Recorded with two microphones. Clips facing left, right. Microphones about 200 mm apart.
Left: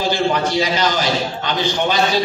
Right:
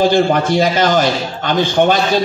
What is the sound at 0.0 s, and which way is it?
A man's voice, 50° right (ahead or behind).